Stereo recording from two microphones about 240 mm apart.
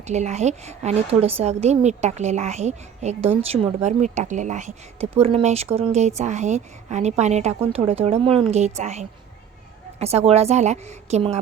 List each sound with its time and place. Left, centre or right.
0.1 s a woman's voice: right